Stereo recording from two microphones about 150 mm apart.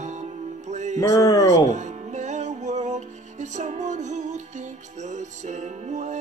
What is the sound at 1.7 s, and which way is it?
Music, 50° right (ahead or behind).